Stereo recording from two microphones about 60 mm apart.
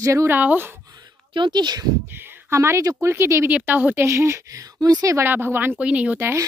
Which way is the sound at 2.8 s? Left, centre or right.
Right.